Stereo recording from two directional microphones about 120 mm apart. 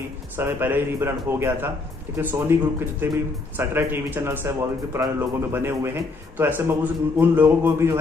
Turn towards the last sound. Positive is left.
turn(degrees=-20)  # may be behind; listen again after turning